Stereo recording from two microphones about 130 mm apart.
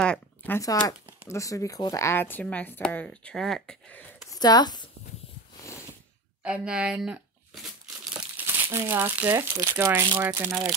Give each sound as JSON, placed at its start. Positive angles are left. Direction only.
{"t": 0.0, "sound": "a sound", "side_deg": 10}
{"t": 0.6, "sound": "speech", "side_deg": 25}
{"t": 4.3, "sound": "speech", "side_deg": 30}
{"t": 6.4, "sound": "crumpling", "side_deg": -10}
{"t": 8.5, "sound": "speech", "side_deg": -20}